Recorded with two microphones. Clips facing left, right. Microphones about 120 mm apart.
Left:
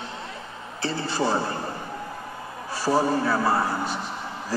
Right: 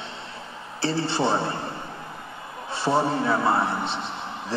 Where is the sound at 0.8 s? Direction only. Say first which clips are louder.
Right 2 dB; 30° right (ahead or behind).